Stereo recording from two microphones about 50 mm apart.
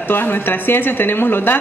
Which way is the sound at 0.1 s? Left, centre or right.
Left.